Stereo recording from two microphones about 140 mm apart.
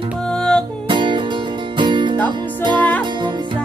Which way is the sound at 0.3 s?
5° left (ahead or behind).